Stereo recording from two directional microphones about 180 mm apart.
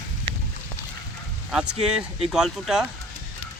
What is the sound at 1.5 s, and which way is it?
Speech, 5° right (ahead or behind).